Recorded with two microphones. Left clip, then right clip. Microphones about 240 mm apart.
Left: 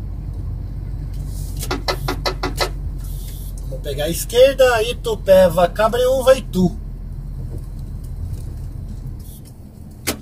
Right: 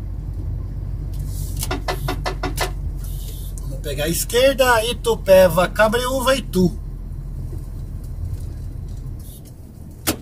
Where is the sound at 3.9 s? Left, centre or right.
Right.